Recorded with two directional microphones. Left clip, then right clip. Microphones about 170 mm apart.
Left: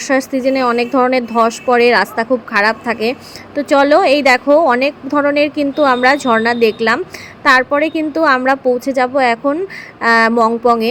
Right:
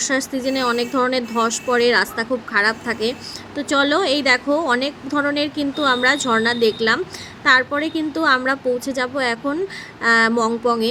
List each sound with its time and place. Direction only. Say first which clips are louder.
0.0 s a woman's voice: left 7 dB; 20° left (ahead or behind)